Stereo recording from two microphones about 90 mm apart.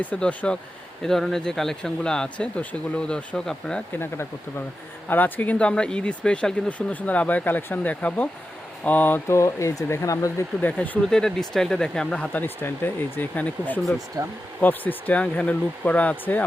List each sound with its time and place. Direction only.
0.0 s speech: 15° left (ahead or behind)
3.9 s speech: 25° left (ahead or behind)
10.6 s speech: 20° left (ahead or behind)
11.0 s speech: 5° left (ahead or behind)
14.2 s speech: 40° right (ahead or behind)
14.6 s speech: 20° left (ahead or behind)